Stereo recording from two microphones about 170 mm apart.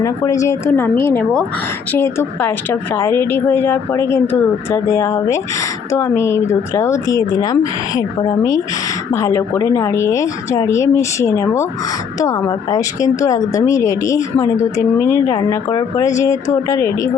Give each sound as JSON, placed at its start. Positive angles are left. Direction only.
{"t": 0.0, "sound": "a woman's voice", "side_deg": 20}
{"t": 15.4, "sound": "speech", "side_deg": 25}